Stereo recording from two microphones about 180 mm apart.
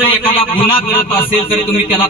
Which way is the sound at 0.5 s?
30° left (ahead or behind).